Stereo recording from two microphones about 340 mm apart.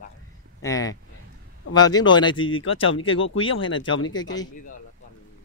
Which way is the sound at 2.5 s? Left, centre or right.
Left.